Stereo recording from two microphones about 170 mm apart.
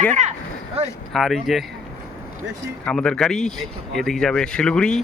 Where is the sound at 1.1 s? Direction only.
Centre (ahead or behind).